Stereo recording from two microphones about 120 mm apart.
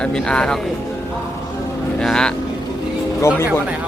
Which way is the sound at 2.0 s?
5° left (ahead or behind).